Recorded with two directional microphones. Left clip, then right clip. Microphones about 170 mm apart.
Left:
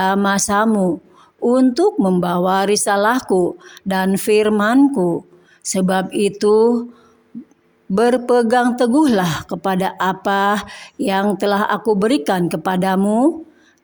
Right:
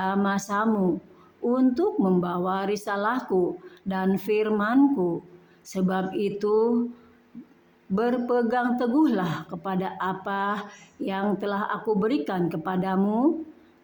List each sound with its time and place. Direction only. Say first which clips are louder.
0.0 s speech: left 10 dB; 40° left (ahead or behind)
7.9 s speech: left 10 dB; 40° left (ahead or behind)